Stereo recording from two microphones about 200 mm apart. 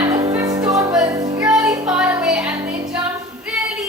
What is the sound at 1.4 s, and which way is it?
Music, 5° right (ahead or behind).